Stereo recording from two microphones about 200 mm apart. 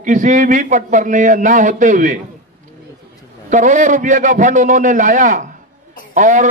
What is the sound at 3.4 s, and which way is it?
A man's voice, 40° right (ahead or behind).